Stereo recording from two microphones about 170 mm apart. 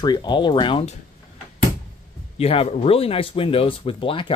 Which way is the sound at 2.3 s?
35° left (ahead or behind).